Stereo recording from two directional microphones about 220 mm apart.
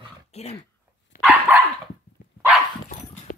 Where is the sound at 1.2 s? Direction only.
5° right (ahead or behind).